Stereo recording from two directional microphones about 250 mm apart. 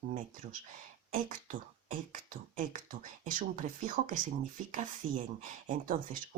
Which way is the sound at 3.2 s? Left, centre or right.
Right.